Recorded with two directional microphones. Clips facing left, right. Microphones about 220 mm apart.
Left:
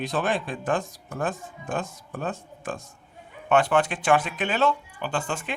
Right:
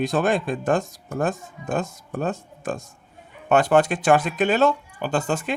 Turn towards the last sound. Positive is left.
turn(degrees=-40)  # may be behind; listen again after turning